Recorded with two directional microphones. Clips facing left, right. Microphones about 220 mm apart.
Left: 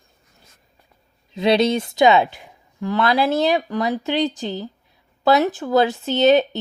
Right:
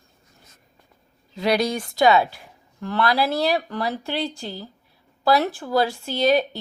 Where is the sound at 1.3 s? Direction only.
20° left (ahead or behind).